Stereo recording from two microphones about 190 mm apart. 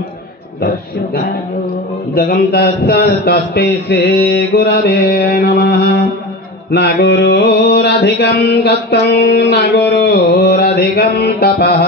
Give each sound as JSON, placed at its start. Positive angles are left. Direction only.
{"t": 2.1, "sound": "mantra", "side_deg": 50}